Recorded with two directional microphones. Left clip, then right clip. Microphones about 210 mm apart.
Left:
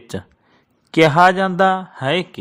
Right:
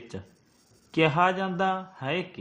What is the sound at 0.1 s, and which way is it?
A man's voice, 40° left (ahead or behind).